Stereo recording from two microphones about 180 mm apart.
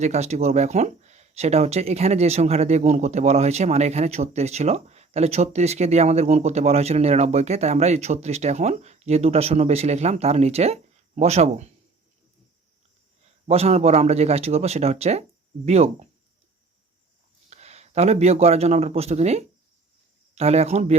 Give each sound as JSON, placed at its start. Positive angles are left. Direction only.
{"t": 0.0, "sound": "speech", "side_deg": -40}
{"t": 13.5, "sound": "speech", "side_deg": -35}
{"t": 17.5, "sound": "a man's voice", "side_deg": -35}